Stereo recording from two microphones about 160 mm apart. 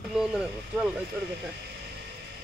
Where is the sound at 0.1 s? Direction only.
5° right (ahead or behind).